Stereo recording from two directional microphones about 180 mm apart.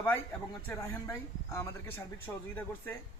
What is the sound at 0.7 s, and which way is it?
Speech, 15° left (ahead or behind).